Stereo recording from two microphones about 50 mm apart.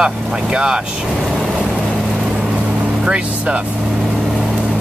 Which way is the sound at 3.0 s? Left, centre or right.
Right.